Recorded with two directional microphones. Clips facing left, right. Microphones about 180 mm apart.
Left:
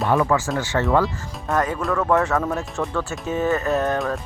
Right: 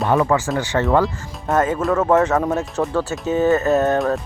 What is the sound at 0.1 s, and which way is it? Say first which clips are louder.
Speech: right 2 dB; 35° right (ahead or behind).